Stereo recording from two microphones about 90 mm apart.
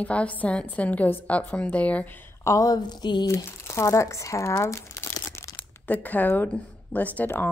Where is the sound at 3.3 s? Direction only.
30° left (ahead or behind).